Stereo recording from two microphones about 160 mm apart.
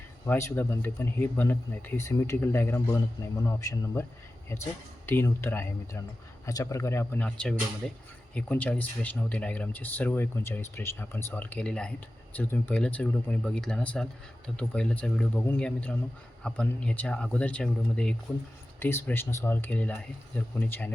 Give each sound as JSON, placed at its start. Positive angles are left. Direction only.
{"t": 0.3, "sound": "speech", "side_deg": 15}